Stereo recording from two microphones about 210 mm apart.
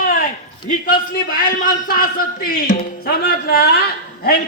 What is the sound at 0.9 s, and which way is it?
A man's voice, 45° left (ahead or behind).